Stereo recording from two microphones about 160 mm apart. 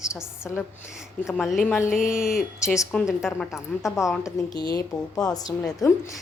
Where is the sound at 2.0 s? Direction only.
5° right (ahead or behind).